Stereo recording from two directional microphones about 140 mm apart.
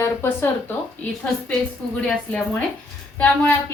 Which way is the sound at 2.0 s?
5° left (ahead or behind).